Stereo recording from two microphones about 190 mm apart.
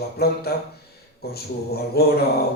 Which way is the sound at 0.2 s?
55° left (ahead or behind).